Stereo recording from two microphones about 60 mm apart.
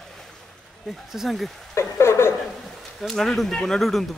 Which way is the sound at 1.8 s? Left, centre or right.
Left.